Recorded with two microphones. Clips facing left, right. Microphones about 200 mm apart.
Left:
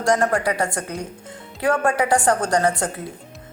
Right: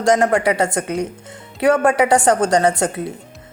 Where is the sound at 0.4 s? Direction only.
80° right.